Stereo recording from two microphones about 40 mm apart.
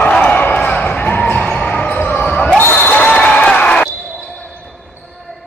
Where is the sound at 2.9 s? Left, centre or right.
Left.